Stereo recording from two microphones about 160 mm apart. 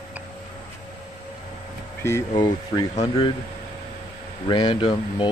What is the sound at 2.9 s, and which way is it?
Speech, 45° left (ahead or behind).